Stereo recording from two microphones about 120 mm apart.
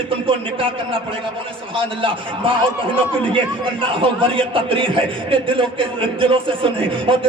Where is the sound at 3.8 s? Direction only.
45° right (ahead or behind).